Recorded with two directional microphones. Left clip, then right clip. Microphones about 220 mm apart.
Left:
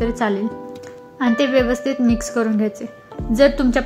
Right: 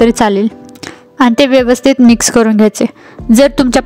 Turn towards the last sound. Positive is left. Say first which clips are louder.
# right 7 dB
turn(degrees=-45)  # may be behind; listen again after turning